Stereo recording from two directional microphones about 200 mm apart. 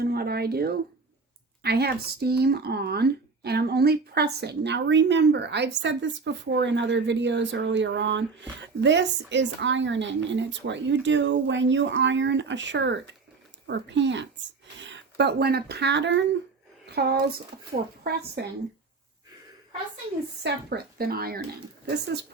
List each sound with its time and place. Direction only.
0.0 s a sound: 50° right (ahead or behind)
1.6 s speech: 55° right (ahead or behind)
16.9 s speech: 50° right (ahead or behind)
18.4 s speech: 55° right (ahead or behind)
20.4 s a woman's voice: 55° right (ahead or behind)